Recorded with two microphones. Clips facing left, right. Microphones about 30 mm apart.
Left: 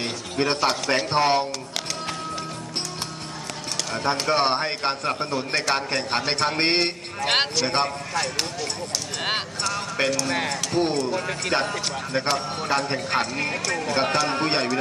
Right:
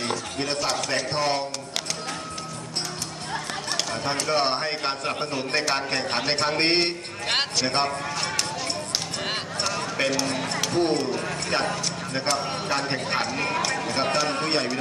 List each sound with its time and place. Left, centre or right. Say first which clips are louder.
0.5 s a man's voice: left 3 dB; left
3.9 s a man's voice: left 4 dB; centre
9.8 s a man's voice: left 1 dB; centre
12.8 s a man's voice: left 1 dB; centre